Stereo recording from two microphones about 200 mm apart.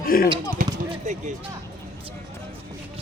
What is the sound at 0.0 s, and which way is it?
Speech, 45° left (ahead or behind).